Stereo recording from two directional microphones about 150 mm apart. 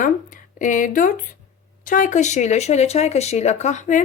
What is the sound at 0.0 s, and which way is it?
Speech, 60° left (ahead or behind).